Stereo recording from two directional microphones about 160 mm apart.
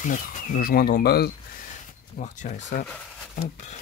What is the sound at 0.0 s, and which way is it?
Speech, 55° left (ahead or behind).